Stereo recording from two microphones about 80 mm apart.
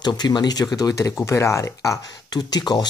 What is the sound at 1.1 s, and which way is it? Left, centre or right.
Speech, left.